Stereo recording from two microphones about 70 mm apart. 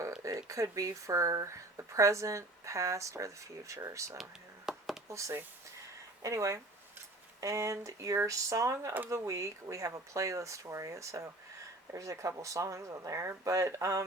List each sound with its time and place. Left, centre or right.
0.2 s speech: right
4.2 s a sound: centre
5.0 s speech: right